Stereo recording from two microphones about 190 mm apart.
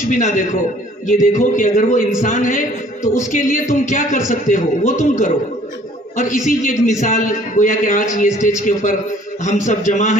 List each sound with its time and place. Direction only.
0.1 s a man's voice: 45° left (ahead or behind)